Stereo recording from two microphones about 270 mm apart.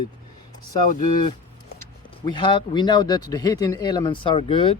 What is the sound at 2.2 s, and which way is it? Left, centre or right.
Speech, centre.